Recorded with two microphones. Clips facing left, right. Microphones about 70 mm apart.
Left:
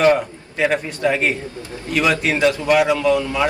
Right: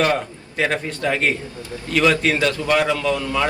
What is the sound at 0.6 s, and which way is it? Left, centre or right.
A man's voice, centre.